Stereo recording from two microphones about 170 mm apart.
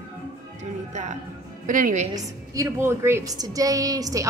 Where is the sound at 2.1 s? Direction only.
15° right (ahead or behind).